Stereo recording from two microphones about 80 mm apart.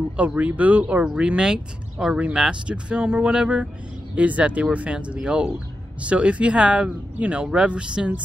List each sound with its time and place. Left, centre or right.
0.2 s speech: centre